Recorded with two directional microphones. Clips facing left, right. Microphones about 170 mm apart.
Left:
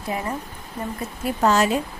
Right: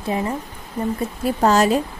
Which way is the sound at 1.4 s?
35° right (ahead or behind).